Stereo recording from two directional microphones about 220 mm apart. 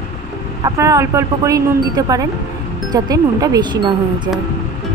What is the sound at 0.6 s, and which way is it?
Speech, 15° right (ahead or behind).